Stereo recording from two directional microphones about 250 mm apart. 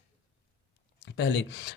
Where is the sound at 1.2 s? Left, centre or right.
Left.